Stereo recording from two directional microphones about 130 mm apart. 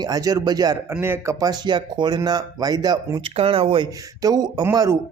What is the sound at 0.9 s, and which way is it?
Speech, 15° right (ahead or behind).